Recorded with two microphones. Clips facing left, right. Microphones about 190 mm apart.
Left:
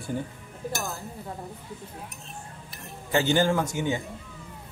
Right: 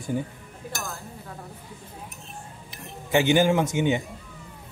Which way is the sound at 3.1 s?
15° right (ahead or behind).